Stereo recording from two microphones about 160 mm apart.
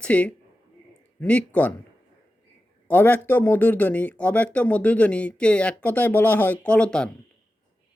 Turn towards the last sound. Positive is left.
turn(degrees=5)  # may be behind; listen again after turning